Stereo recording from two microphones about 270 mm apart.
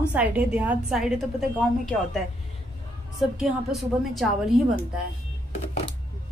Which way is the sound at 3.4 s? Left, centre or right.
Centre.